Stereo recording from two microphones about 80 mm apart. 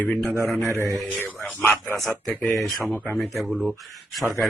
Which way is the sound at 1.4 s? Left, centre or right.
Left.